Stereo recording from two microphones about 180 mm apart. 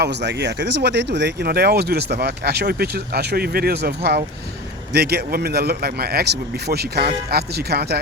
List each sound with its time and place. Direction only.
0.0 s speech: 70° right (ahead or behind)